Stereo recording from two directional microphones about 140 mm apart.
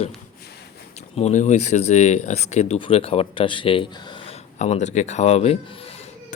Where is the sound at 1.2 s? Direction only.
55° left (ahead or behind); by 4.3 s 35° left (ahead or behind).